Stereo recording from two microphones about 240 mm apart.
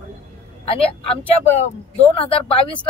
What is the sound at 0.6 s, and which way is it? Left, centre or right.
A woman's voice, left.